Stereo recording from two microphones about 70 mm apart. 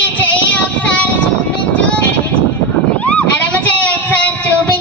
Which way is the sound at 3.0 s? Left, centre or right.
Left.